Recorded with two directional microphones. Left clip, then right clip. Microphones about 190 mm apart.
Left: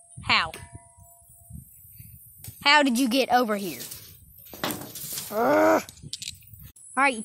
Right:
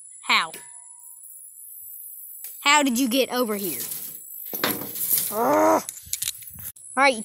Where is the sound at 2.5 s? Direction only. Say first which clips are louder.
Even; 10° left (ahead or behind).